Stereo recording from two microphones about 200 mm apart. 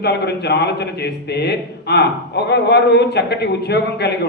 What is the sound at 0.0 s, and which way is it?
A man's voice, 55° left (ahead or behind).